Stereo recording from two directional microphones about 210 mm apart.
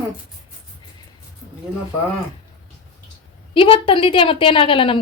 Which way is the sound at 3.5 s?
25° left (ahead or behind).